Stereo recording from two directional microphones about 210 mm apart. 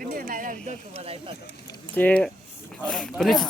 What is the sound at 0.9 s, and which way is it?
Speech, 25° right (ahead or behind).